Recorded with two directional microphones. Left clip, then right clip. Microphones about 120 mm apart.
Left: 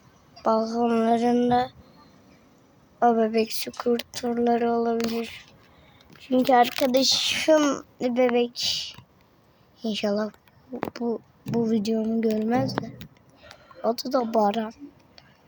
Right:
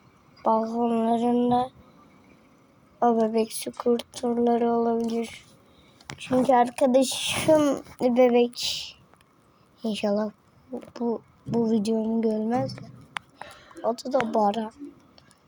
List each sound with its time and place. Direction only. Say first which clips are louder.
0.4 s speech: left 1 dB; 40° left (ahead or behind)
3.0 s speech: left 1 dB; 35° left (ahead or behind)
6.1 s speech: left 1 dB; 45° left (ahead or behind)
6.9 s speech: left 1 dB; 20° left (ahead or behind)
8.0 s speech: right 3 dB; 15° left (ahead or behind)
10.9 s a woman's voice: right 4 dB; 35° left (ahead or behind)